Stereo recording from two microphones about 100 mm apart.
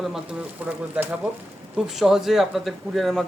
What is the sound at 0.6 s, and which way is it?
Speech, 15° right (ahead or behind).